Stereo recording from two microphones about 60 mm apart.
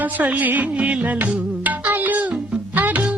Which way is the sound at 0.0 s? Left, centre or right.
Right.